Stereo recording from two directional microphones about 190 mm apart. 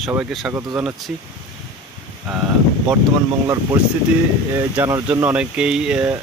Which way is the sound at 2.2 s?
10° right (ahead or behind).